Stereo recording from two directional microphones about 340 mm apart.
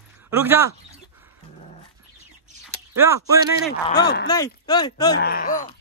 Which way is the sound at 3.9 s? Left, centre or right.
Left.